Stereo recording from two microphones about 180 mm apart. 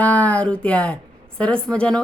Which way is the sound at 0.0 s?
10° left (ahead or behind).